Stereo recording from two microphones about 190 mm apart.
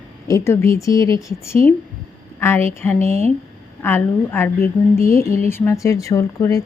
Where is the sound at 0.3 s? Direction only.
15° left (ahead or behind).